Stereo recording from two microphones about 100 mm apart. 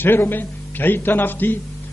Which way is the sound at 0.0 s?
20° left (ahead or behind).